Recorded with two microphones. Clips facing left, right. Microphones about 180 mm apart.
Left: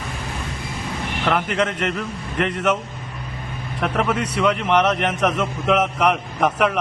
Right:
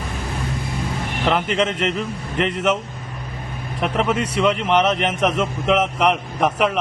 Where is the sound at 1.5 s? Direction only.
25° right (ahead or behind).